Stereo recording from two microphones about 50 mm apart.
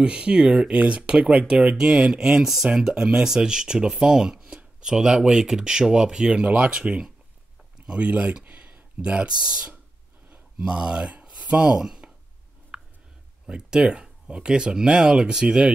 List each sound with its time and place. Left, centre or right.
0.0 s speech: centre
0.7 s speech: right
8.5 s a sound: right
10.6 s speech: centre
12.7 s a sound: centre
13.5 s speech: centre